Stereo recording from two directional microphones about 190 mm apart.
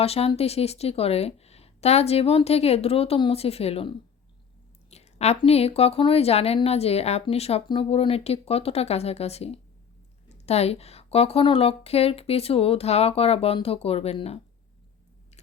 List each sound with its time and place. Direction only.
0.0 s a woman's voice: 30° left (ahead or behind)